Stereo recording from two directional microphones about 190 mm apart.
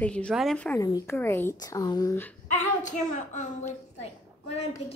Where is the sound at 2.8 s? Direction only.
40° left (ahead or behind).